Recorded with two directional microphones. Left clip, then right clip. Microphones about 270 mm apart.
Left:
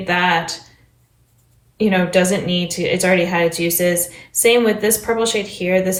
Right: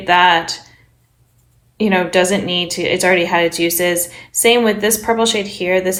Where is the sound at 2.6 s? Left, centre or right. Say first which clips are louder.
Right 3 dB; right.